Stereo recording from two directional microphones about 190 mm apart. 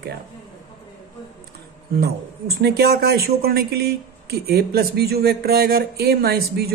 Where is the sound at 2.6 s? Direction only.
55° right (ahead or behind).